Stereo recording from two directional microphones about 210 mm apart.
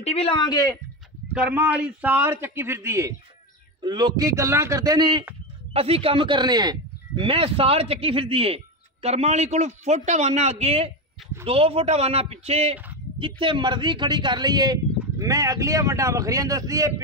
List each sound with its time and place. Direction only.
0.0 s speech: 25° left (ahead or behind)
1.3 s speech: 5° right (ahead or behind)